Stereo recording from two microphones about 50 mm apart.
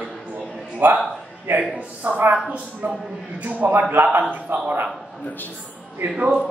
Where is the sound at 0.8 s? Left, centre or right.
Right.